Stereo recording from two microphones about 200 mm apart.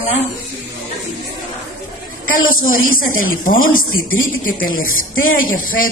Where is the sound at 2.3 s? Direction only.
45° left (ahead or behind).